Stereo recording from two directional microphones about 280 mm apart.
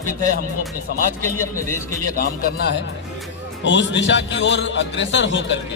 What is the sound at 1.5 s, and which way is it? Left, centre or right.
Speech, centre.